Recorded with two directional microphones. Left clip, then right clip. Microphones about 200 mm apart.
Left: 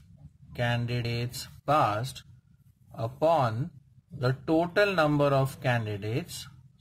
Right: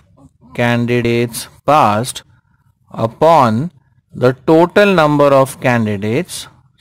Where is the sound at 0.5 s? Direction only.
45° right (ahead or behind).